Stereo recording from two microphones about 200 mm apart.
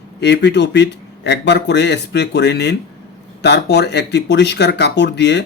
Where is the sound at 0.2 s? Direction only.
55° left (ahead or behind).